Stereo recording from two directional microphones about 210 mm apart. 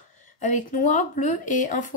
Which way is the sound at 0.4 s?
35° left (ahead or behind).